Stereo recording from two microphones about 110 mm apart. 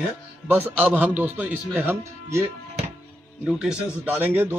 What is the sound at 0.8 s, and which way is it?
A man's voice, 15° right (ahead or behind).